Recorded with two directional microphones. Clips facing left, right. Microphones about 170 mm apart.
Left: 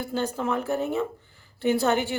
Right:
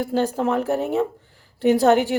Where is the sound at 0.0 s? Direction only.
90° right.